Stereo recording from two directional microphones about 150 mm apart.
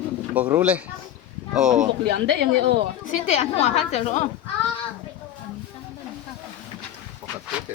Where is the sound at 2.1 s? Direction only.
90° right.